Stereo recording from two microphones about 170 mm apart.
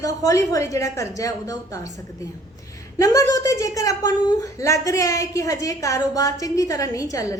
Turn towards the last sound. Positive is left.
turn(degrees=20)  # may be behind; listen again after turning